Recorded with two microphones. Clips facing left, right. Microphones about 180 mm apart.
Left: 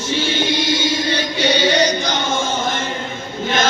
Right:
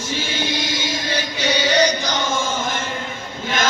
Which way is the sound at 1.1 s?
30° left (ahead or behind).